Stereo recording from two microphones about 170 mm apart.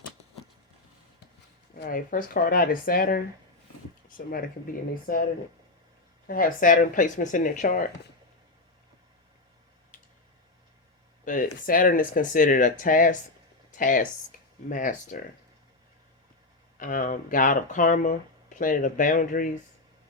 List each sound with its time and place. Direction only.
1.7 s speech: 60° left (ahead or behind)
4.3 s speech: 55° left (ahead or behind)
6.2 s speech: 55° left (ahead or behind)
9.9 s tick: 50° left (ahead or behind)
11.3 s speech: 55° left (ahead or behind)
16.7 s speech: 50° left (ahead or behind)